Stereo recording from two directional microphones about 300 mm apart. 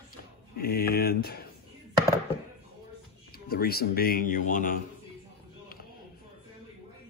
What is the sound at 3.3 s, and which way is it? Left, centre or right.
Speech, left.